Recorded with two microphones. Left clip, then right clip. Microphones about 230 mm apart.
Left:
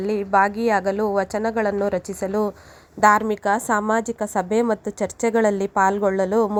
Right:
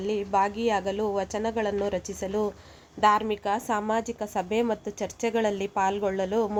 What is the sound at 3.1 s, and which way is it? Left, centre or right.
A woman's voice, left.